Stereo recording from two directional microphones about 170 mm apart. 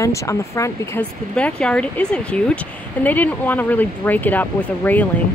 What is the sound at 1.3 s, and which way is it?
Speech, 5° left (ahead or behind).